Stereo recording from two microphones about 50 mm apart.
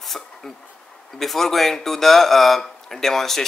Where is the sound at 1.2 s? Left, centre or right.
Centre.